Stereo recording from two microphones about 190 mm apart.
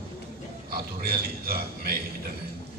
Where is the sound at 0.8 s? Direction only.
55° right (ahead or behind).